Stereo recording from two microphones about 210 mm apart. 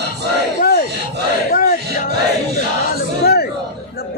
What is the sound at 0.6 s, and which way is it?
Battle cry, 45° left (ahead or behind).